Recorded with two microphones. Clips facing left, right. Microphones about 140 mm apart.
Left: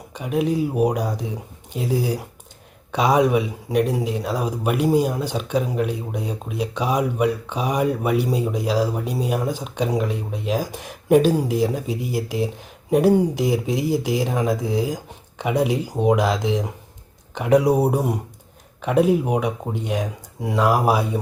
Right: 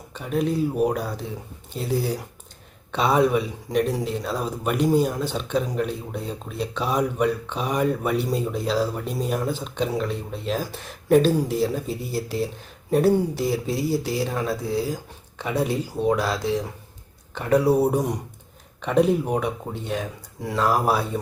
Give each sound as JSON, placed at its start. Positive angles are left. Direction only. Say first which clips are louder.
{"t": 0.1, "sound": "a man's voice", "louder": "left 2 dB", "side_deg": 10}